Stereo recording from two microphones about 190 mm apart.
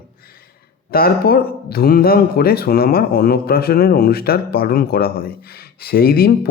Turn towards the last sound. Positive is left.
turn(degrees=55)  # may be behind; listen again after turning